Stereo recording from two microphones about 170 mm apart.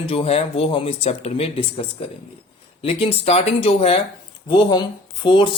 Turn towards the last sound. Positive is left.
turn(degrees=30)  # may be behind; listen again after turning